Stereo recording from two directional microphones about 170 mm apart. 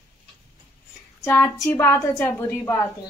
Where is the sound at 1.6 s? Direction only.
15° left (ahead or behind).